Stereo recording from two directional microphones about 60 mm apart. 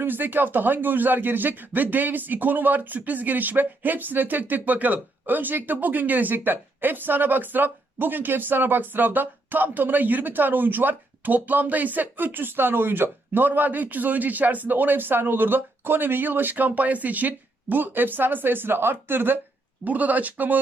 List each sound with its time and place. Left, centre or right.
0.0 s speech: right